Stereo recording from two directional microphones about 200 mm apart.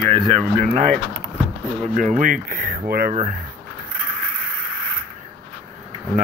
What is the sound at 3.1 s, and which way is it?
Speech, 35° right (ahead or behind).